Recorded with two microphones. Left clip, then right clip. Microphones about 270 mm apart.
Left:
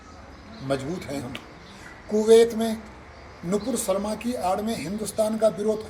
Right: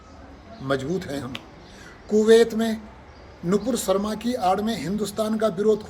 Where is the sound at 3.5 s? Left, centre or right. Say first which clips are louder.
Right 3 dB; right.